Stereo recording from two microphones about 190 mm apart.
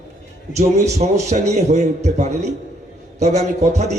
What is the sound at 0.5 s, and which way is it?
A man's voice, 35° right (ahead or behind).